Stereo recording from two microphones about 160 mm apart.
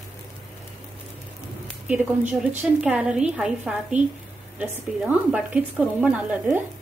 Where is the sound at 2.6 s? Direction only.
5° right (ahead or behind).